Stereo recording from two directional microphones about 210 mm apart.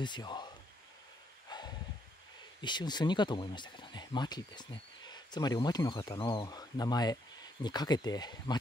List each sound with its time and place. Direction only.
0.0 s speech: 20° left (ahead or behind)
1.5 s a sound: 20° left (ahead or behind)
2.6 s speech: 20° left (ahead or behind)